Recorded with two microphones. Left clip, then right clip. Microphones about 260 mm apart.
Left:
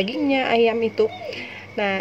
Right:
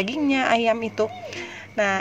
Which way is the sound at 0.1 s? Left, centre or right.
Right.